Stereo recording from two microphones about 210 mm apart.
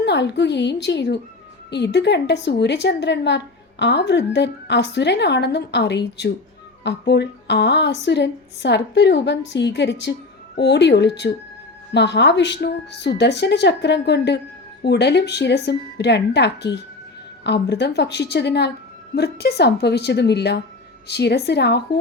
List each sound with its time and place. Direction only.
0.0 s a woman's voice: 55° left (ahead or behind)